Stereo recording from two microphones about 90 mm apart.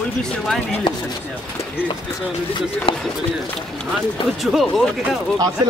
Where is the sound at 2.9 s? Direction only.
90° left.